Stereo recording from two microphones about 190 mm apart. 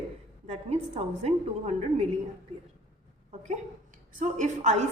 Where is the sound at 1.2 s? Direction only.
35° right (ahead or behind).